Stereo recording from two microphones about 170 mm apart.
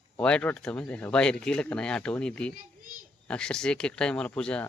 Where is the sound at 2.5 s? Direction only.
55° right (ahead or behind).